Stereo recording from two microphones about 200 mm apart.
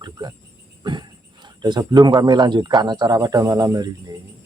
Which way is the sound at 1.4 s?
20° right (ahead or behind).